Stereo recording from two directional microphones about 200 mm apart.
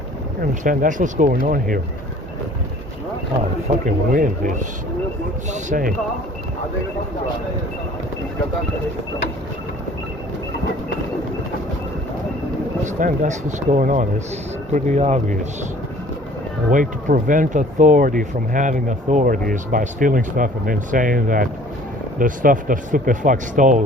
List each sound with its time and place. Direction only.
0.6 s speech: 40° right (ahead or behind)
3.8 s speech: 40° right (ahead or behind)
12.8 s speech: 40° right (ahead or behind)
16.7 s speech: 40° right (ahead or behind)